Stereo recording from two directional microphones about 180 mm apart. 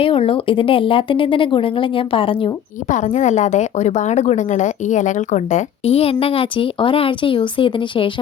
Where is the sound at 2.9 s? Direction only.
40° left (ahead or behind).